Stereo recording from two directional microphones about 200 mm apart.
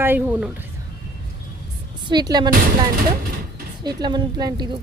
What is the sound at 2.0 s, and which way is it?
Speech, 20° right (ahead or behind).